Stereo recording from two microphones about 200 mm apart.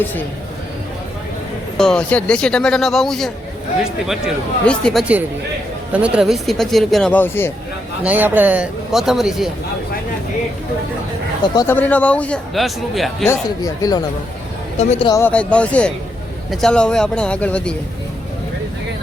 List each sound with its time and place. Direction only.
1.8 s speech: 5° left (ahead or behind)
8.0 s speech: 10° right (ahead or behind)
11.5 s speech: 10° left (ahead or behind)
13.2 s speech: 15° left (ahead or behind)
14.8 s speech: 35° left (ahead or behind)
15.1 s speech: 10° left (ahead or behind)